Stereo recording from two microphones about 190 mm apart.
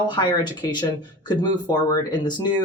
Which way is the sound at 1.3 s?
20° left (ahead or behind).